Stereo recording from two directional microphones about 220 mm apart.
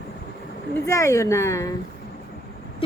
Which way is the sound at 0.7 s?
15° left (ahead or behind).